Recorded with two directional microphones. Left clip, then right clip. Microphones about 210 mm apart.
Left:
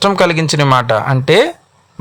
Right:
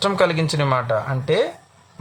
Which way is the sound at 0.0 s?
35° left (ahead or behind).